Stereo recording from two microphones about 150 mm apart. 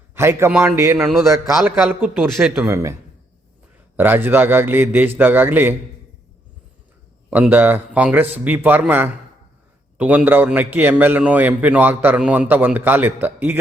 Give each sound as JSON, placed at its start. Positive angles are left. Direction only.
{"t": 0.1, "sound": "a man's voice", "side_deg": -15}
{"t": 1.0, "sound": "speech", "side_deg": 0}
{"t": 2.6, "sound": "a man's voice", "side_deg": -20}
{"t": 3.9, "sound": "a man's voice", "side_deg": -15}
{"t": 7.3, "sound": "a man's voice", "side_deg": -10}